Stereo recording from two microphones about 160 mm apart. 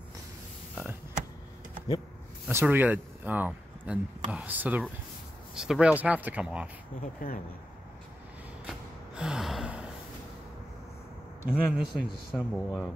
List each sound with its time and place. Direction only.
2.4 s speech: 10° right (ahead or behind)
7.2 s speech: 60° left (ahead or behind)
8.6 s gasp: 5° right (ahead or behind)
11.4 s a man's voice: 5° right (ahead or behind)